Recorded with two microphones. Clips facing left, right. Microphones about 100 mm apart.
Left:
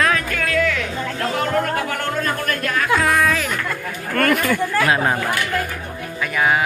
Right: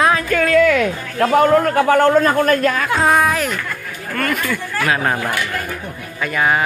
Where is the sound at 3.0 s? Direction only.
20° right (ahead or behind).